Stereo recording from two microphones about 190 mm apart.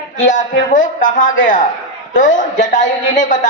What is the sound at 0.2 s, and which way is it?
A man's voice, 40° left (ahead or behind).